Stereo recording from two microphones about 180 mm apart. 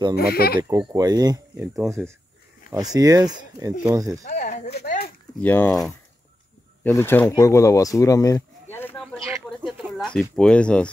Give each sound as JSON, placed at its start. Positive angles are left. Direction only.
{"t": 0.1, "sound": "speech", "side_deg": 60}
{"t": 0.6, "sound": "speech", "side_deg": -20}
{"t": 2.7, "sound": "speech", "side_deg": -20}
{"t": 4.3, "sound": "a sound", "side_deg": 40}
{"t": 4.8, "sound": "a sound", "side_deg": 50}
{"t": 5.4, "sound": "speech", "side_deg": 10}
{"t": 6.8, "sound": "speech", "side_deg": 10}
{"t": 9.6, "sound": "a sound", "side_deg": 0}
{"t": 10.3, "sound": "speech", "side_deg": 5}